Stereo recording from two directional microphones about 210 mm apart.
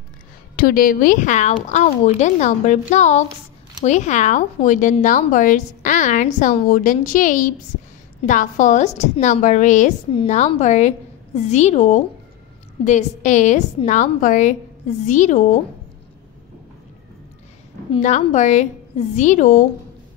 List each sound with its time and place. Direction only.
0.6 s a woman's voice: 45° left (ahead or behind)
17.9 s a woman's voice: 30° left (ahead or behind)